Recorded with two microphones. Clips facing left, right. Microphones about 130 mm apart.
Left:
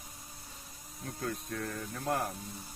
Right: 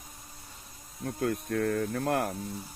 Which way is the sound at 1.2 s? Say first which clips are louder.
Right 9 dB; 55° right (ahead or behind).